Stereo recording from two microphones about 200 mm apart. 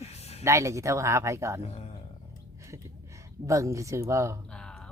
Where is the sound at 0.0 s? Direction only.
30° left (ahead or behind).